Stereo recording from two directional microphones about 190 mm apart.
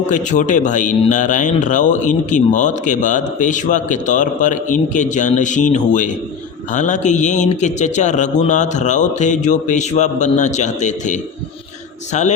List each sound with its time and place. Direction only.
0.1 s speech: 40° left (ahead or behind)